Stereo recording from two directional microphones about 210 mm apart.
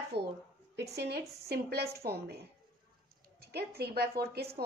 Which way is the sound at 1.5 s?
50° right (ahead or behind).